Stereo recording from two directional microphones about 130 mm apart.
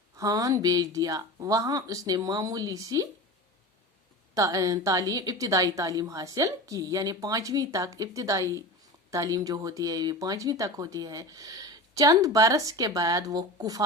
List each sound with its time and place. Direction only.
0.2 s speech: 25° right (ahead or behind)
4.4 s speech: 25° right (ahead or behind)